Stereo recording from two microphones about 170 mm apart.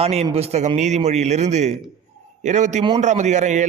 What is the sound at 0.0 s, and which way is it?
A man's voice, 35° right (ahead or behind).